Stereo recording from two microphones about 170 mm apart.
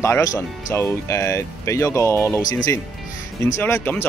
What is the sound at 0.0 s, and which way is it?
Speech, 20° left (ahead or behind).